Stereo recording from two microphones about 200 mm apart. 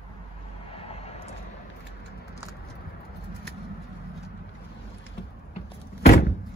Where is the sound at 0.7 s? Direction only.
30° left (ahead or behind).